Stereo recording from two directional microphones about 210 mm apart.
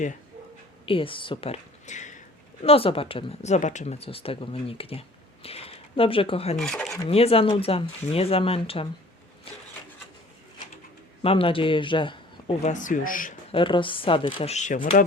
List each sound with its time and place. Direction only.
0.9 s a woman's voice: 25° left (ahead or behind)
6.6 s speech: 5° left (ahead or behind)
7.1 s speech: 30° left (ahead or behind)
11.2 s speech: 25° left (ahead or behind)
13.5 s speech: 25° left (ahead or behind)